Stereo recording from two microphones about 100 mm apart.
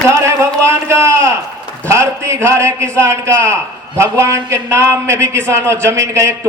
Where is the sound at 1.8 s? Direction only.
30° right (ahead or behind).